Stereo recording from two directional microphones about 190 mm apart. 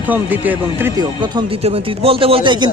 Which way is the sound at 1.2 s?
30° right (ahead or behind).